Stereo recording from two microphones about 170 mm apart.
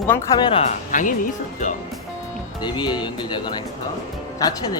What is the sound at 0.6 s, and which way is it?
Speech, 45° left (ahead or behind).